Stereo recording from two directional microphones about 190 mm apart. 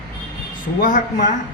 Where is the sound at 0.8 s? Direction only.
45° left (ahead or behind).